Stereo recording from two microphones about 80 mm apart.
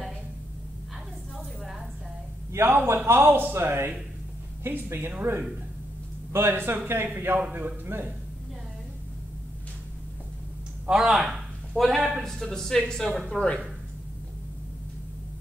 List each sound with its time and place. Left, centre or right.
2.5 s a man's voice: right
10.9 s speech: centre